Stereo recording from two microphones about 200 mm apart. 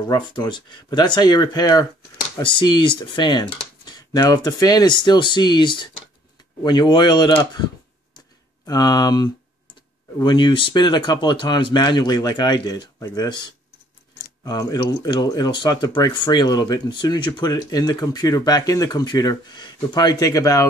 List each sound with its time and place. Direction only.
0.1 s speech: 20° left (ahead or behind)
8.6 s speech: 20° left (ahead or behind)
14.4 s speech: 20° left (ahead or behind)